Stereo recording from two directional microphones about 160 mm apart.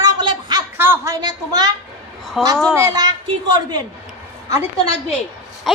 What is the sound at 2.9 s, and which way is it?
Speech, 30° right (ahead or behind).